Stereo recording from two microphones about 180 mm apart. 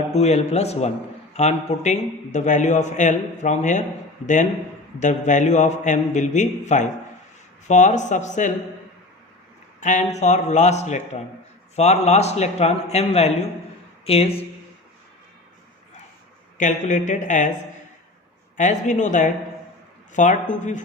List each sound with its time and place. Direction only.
0.1 s a man's voice: 35° left (ahead or behind)
4.9 s a man's voice: 40° left (ahead or behind)
9.8 s a man's voice: 40° left (ahead or behind)
16.6 s speech: 45° left (ahead or behind)
18.5 s speech: 40° left (ahead or behind)